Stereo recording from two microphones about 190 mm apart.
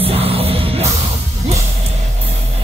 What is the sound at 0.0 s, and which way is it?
Music, 30° right (ahead or behind).